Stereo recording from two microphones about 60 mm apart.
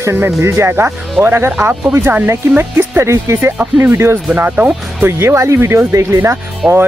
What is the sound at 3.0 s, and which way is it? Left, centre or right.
Speech, right.